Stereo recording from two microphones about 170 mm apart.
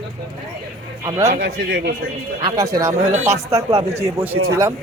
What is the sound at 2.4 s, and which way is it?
Speech, 20° right (ahead or behind).